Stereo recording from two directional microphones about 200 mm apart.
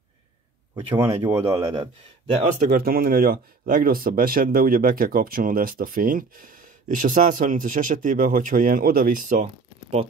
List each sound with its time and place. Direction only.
0.7 s speech: 20° right (ahead or behind)
2.4 s speech: 45° right (ahead or behind)